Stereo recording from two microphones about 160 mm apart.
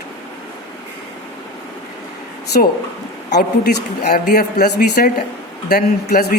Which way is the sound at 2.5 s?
60° left (ahead or behind).